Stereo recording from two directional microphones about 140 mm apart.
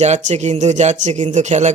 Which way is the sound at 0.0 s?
55° right (ahead or behind).